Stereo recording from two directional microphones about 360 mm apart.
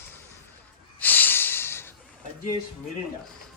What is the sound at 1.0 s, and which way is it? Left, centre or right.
Snort, centre.